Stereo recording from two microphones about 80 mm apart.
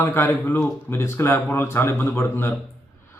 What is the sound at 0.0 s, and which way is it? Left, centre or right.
A man's voice, left.